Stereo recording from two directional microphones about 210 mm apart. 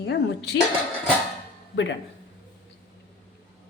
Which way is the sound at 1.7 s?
60° left (ahead or behind).